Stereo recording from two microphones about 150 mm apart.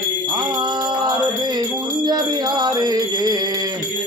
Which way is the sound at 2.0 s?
30° right (ahead or behind).